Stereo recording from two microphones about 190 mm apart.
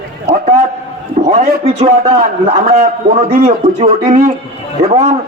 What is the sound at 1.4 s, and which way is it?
Speech, 40° right (ahead or behind).